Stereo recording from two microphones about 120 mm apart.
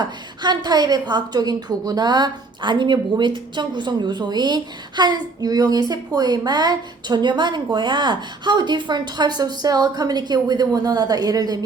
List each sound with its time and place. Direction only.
0.0 s a woman's voice: 35° right (ahead or behind)